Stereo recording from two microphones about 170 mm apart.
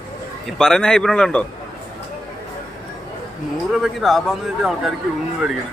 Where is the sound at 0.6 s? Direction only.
5° left (ahead or behind).